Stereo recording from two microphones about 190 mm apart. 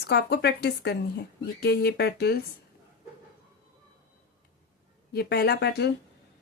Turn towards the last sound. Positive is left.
turn(degrees=60)  # may be behind; listen again after turning